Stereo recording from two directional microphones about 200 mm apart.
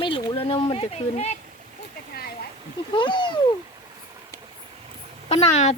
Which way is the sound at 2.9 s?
25° left (ahead or behind).